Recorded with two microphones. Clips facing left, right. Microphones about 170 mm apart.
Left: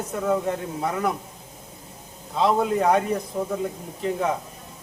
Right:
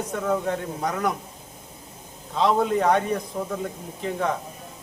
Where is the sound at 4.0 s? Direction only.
5° left (ahead or behind).